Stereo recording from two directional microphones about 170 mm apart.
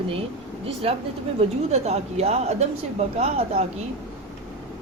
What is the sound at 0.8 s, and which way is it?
A woman's voice, 35° right (ahead or behind).